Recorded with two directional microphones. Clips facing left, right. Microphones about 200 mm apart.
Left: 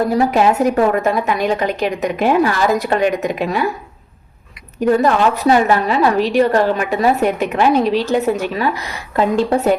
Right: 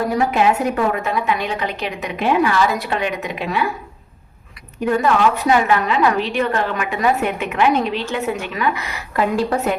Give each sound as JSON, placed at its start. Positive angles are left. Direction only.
{"t": 0.2, "sound": "a woman's voice", "side_deg": 40}
{"t": 4.9, "sound": "a woman's voice", "side_deg": 40}